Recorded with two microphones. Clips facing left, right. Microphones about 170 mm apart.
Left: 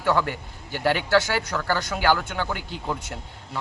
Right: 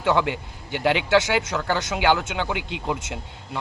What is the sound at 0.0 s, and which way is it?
Speech, 20° right (ahead or behind).